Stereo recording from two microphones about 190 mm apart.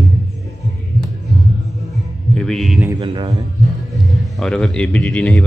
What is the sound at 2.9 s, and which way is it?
Speech, 25° right (ahead or behind).